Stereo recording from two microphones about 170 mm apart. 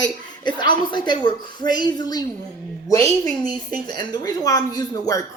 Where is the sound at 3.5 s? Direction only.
25° left (ahead or behind).